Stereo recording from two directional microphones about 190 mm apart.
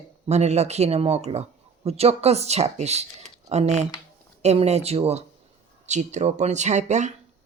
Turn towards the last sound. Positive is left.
turn(degrees=-40)  # may be behind; listen again after turning